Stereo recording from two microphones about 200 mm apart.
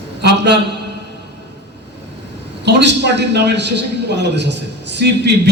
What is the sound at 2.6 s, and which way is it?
A man's voice, 60° right (ahead or behind).